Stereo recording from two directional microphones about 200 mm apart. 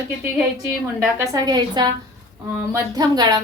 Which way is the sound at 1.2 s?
15° right (ahead or behind).